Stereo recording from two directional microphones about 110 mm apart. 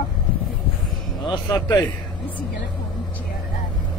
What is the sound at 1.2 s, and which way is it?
Speech, 45° left (ahead or behind).